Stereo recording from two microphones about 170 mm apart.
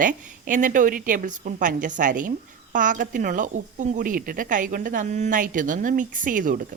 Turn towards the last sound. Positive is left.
turn(degrees=-50)  # may be behind; listen again after turning